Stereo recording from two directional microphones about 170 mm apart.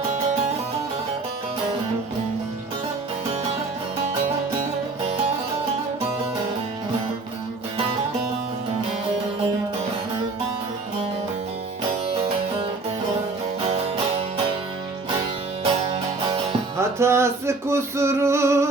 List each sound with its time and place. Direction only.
13.7 s music: 35° right (ahead or behind)
16.5 s music: 15° right (ahead or behind)